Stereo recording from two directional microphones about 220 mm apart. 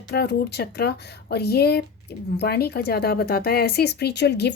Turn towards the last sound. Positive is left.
turn(degrees=50)  # may be behind; listen again after turning